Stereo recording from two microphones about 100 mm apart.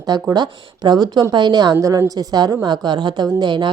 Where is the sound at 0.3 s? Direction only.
50° right (ahead or behind).